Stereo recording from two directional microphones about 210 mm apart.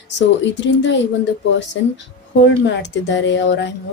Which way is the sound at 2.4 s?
55° left (ahead or behind).